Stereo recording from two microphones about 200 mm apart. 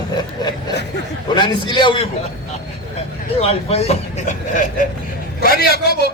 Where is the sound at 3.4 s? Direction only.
30° left (ahead or behind).